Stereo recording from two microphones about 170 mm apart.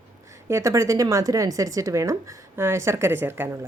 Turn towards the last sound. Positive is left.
turn(degrees=-15)  # may be behind; listen again after turning